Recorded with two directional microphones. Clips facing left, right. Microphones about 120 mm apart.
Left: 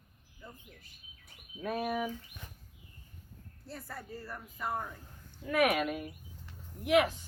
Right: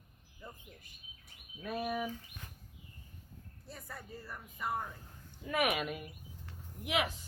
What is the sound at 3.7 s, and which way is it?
A woman's voice, centre (ahead or behind).